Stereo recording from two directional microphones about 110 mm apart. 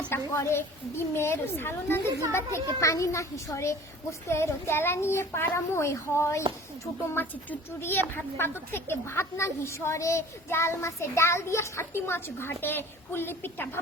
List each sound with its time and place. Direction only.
0.1 s a woman's voice: 25° left (ahead or behind)